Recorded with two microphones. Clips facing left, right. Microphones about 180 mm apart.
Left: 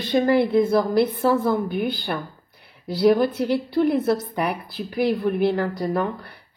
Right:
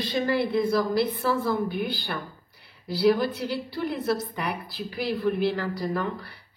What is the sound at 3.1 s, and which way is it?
A woman's voice, 60° left (ahead or behind).